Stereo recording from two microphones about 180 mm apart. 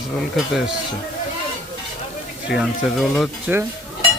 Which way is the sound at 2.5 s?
Centre (ahead or behind).